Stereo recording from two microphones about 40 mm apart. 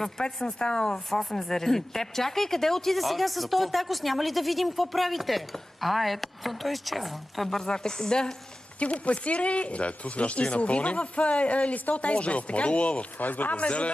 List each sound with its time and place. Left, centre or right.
0.0 s speech: centre
0.5 s speech: left
0.9 s speech: centre
8.7 s speech: left
13.2 s speech: left
13.6 s speech: left